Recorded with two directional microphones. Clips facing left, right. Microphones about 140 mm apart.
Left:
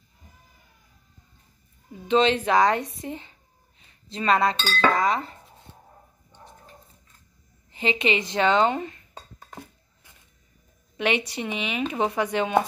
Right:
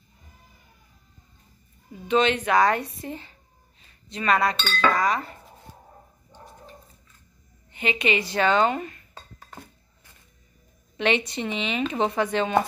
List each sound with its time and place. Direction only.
2.0 s chink: 30° left (ahead or behind)
7.7 s speech: 25° left (ahead or behind)
11.0 s speech: 10° left (ahead or behind)